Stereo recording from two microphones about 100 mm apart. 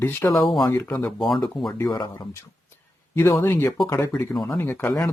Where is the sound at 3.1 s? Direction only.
25° left (ahead or behind).